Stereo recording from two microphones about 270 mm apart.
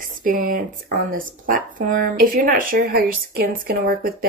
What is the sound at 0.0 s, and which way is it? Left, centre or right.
Speech, right.